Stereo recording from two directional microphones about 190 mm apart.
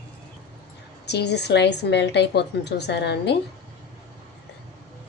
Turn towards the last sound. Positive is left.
turn(degrees=65)  # may be behind; listen again after turning